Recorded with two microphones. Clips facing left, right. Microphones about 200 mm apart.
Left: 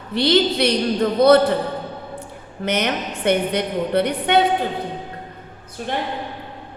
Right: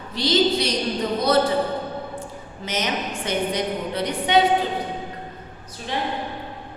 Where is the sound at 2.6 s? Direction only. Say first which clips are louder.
Left 4 dB; 60° left (ahead or behind).